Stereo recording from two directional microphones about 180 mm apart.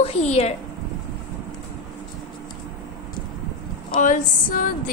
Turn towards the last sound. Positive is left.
turn(degrees=50)  # may be behind; listen again after turning